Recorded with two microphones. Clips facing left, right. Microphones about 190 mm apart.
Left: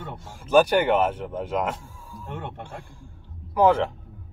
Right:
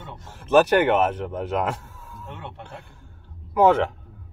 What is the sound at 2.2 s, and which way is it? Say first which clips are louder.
Speech: left 4 dB; 50° left (ahead or behind).